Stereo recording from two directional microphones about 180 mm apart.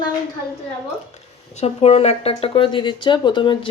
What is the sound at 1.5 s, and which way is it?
Speech, 35° left (ahead or behind).